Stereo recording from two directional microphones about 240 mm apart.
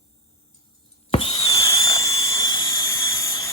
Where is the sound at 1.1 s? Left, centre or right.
Left.